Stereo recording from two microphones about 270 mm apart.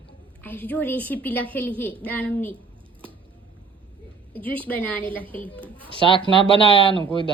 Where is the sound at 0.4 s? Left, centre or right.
Centre.